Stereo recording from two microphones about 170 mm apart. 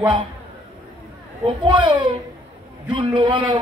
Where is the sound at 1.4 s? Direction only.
25° right (ahead or behind).